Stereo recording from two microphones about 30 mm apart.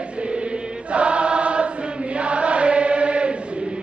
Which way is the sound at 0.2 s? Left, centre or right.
Right.